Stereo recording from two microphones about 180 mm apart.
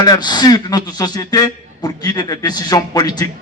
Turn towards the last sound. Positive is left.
turn(degrees=20)  # may be behind; listen again after turning